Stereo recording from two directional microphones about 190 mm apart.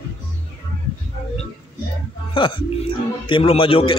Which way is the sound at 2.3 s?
25° left (ahead or behind).